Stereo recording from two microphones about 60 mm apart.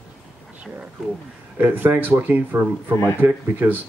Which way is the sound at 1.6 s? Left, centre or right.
Right.